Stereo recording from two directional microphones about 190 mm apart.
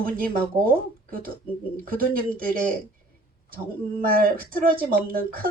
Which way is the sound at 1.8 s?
50° right (ahead or behind).